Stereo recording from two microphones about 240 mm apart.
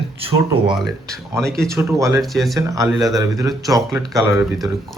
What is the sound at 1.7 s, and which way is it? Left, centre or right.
Speech, centre.